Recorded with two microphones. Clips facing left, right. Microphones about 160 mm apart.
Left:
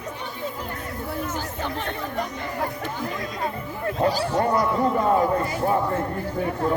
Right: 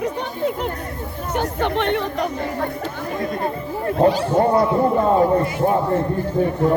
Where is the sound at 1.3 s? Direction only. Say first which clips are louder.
Right 8 dB; 65° right (ahead or behind).